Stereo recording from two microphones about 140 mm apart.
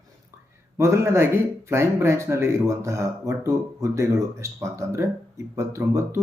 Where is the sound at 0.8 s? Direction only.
20° right (ahead or behind).